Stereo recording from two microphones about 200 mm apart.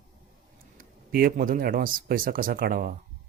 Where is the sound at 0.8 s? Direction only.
45° right (ahead or behind).